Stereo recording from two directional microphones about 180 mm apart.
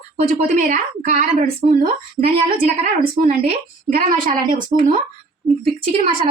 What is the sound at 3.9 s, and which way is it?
A woman's voice, 50° right (ahead or behind).